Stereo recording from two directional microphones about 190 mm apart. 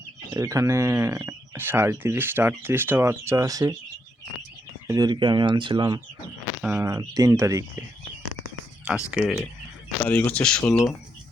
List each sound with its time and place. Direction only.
0.3 s speech: 15° right (ahead or behind)
4.9 s speech: 20° right (ahead or behind)
6.6 s speech: 5° right (ahead or behind)
9.0 s speech: 5° right (ahead or behind)
10.0 s speech: 10° left (ahead or behind)